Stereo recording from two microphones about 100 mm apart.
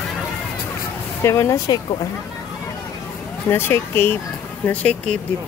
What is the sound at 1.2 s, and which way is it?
Speech, 30° left (ahead or behind).